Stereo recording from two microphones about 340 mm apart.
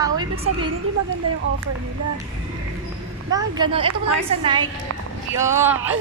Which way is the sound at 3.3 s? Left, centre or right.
Centre.